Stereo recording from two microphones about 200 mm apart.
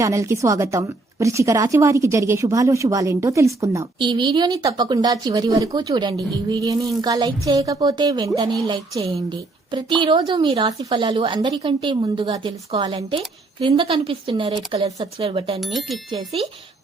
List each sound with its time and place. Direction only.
0.0 s a woman's voice: 15° right (ahead or behind)
9.7 s a woman's voice: 25° right (ahead or behind)
15.6 s speech: centre (ahead or behind)
16.1 s a woman's voice: 30° right (ahead or behind)